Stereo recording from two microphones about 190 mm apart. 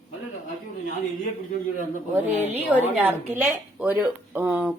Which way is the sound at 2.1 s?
10° right (ahead or behind).